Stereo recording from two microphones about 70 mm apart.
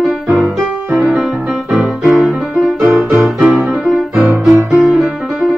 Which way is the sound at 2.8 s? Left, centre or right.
Right.